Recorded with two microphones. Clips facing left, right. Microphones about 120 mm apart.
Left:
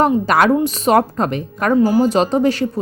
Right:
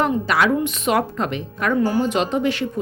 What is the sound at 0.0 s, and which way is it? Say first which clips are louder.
A woman's voice: left 5 dB; 45° left (ahead or behind).